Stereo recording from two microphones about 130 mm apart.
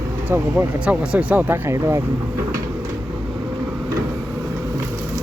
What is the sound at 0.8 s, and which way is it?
Speech, 10° right (ahead or behind).